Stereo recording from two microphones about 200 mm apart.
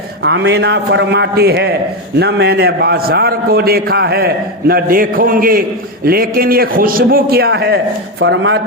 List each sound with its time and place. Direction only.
0.2 s a man's voice: 60° right (ahead or behind)